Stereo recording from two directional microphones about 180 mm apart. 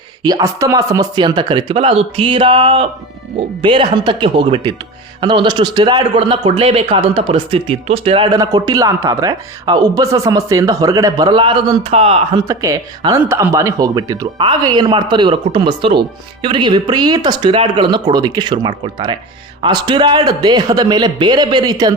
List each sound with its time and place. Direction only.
0.2 s speech: 20° right (ahead or behind)
12.5 s speech: 20° right (ahead or behind)